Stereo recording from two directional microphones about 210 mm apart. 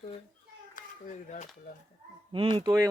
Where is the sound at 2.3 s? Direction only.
25° right (ahead or behind).